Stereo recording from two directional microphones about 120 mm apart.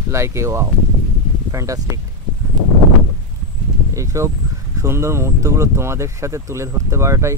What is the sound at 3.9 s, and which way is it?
Speech, 25° right (ahead or behind).